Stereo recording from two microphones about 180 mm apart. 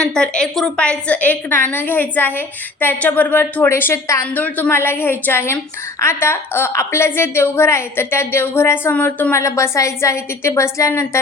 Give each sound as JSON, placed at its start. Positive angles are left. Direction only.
{"t": 0.0, "sound": "a woman's voice", "side_deg": 5}